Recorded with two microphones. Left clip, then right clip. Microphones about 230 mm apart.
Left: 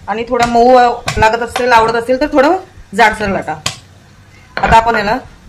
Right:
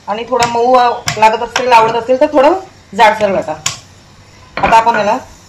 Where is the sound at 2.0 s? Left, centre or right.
Left.